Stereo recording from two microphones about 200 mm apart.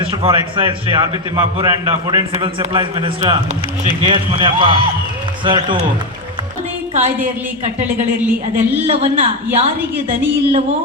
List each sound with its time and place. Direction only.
0.0 s a man's voice: 25° right (ahead or behind)
2.3 s a man's voice: 30° right (ahead or behind)
6.9 s a woman's voice: 35° right (ahead or behind)
8.5 s a man's voice: 30° right (ahead or behind)